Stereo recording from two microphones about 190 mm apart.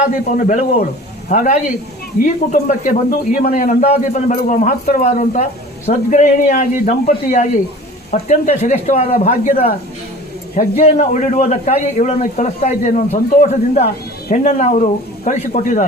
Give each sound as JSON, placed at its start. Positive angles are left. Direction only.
{"t": 0.0, "sound": "a man's voice", "side_deg": 40}